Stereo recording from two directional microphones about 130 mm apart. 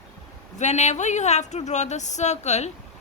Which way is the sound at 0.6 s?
60° left (ahead or behind).